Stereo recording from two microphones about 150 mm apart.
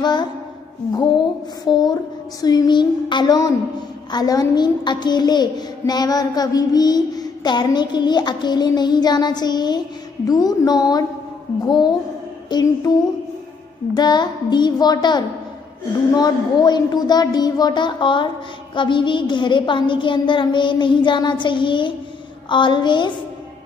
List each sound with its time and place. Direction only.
0.0 s a child's voice: 30° left (ahead or behind)
1.6 s a woman's voice: 25° left (ahead or behind)
13.9 s a woman's voice: 30° left (ahead or behind)